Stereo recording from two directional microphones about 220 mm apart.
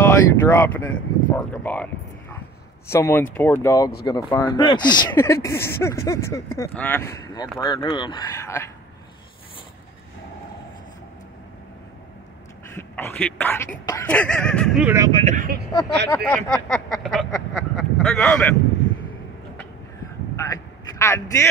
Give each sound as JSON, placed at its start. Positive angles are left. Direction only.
{"t": 0.0, "sound": "speech", "side_deg": 10}
{"t": 2.9, "sound": "speech", "side_deg": 10}
{"t": 12.6, "sound": "speech", "side_deg": 10}
{"t": 15.0, "sound": "speech", "side_deg": -20}
{"t": 15.2, "sound": "speech", "side_deg": -40}
{"t": 16.4, "sound": "speech", "side_deg": 5}
{"t": 20.4, "sound": "a sound", "side_deg": 15}
{"t": 21.0, "sound": "speech", "side_deg": 15}